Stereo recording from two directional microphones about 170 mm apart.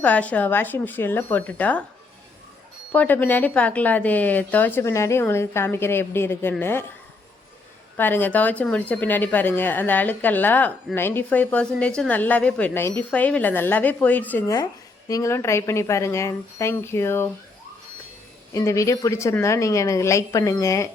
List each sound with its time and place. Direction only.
0.0 s a woman's voice: 10° left (ahead or behind)
2.9 s a woman's voice: 10° left (ahead or behind)
7.9 s a woman's voice: 10° left (ahead or behind)
18.5 s a woman's voice: 15° left (ahead or behind)